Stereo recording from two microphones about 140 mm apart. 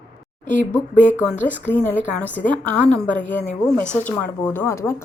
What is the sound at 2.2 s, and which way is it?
Speech, 10° left (ahead or behind).